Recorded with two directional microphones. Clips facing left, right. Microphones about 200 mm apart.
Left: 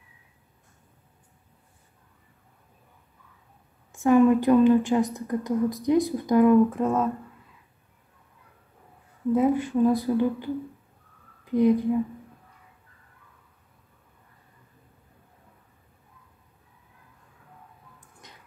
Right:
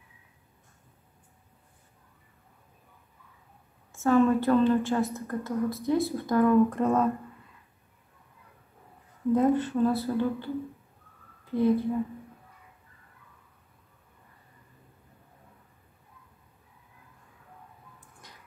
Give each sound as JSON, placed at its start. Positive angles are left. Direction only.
{"t": 3.9, "sound": "a woman's voice", "side_deg": 15}
{"t": 6.7, "sound": "speech", "side_deg": 5}
{"t": 9.3, "sound": "a woman's voice", "side_deg": 10}
{"t": 18.2, "sound": "a sound", "side_deg": 20}